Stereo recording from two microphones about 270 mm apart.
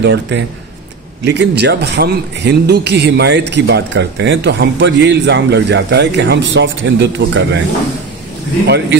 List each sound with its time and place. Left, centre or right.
0.0 s speech: right